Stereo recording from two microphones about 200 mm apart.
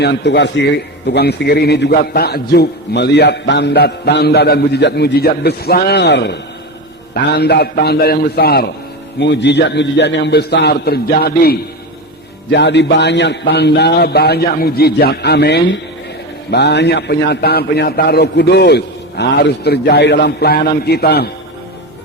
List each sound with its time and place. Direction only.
0.0 s a man's voice: 60° left (ahead or behind)